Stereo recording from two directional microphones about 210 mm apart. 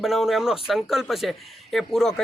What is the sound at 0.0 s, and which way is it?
Speech, centre (ahead or behind).